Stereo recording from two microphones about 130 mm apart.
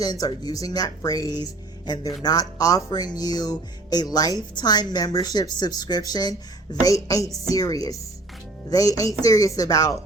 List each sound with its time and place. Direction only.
0.0 s speech: 30° left (ahead or behind)